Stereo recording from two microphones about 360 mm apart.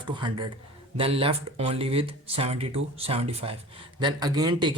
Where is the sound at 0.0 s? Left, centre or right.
Centre.